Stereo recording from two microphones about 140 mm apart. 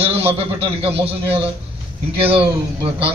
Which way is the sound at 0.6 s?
40° right (ahead or behind).